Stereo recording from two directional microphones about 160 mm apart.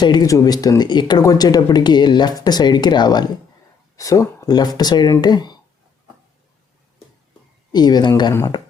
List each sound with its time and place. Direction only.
0.0 s speech: 25° left (ahead or behind)
7.7 s speech: 25° left (ahead or behind)